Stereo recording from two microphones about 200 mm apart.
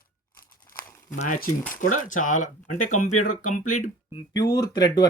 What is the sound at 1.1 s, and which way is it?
Speech, 40° left (ahead or behind).